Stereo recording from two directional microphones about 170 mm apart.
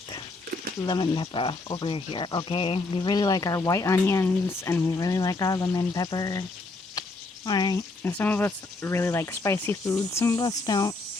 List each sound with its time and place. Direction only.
0.9 s speech: 25° left (ahead or behind)
7.4 s speech: 20° left (ahead or behind)
8.2 s speech: 10° left (ahead or behind)